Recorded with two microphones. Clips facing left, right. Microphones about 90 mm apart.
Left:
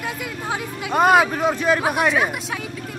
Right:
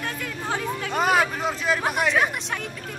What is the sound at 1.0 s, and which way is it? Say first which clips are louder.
Speech: left 6 dB; 55° left (ahead or behind).